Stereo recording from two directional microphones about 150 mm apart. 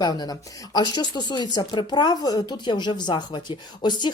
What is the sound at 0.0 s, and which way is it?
Speech, 25° left (ahead or behind).